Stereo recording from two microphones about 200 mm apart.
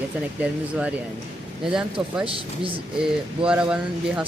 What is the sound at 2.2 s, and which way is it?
Speech, 25° right (ahead or behind).